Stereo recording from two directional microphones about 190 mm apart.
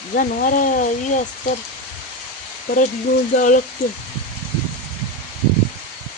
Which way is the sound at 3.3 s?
45° left (ahead or behind).